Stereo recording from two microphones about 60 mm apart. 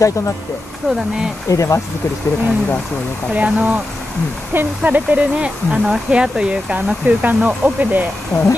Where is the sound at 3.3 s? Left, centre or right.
Right.